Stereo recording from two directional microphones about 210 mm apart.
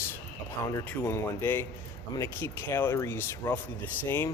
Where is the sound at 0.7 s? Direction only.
15° left (ahead or behind).